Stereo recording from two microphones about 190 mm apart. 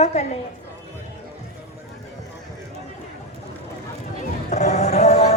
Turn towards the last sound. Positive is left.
turn(degrees=35)  # may be behind; listen again after turning